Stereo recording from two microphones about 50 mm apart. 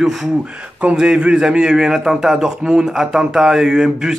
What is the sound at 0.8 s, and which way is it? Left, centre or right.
Speech, centre.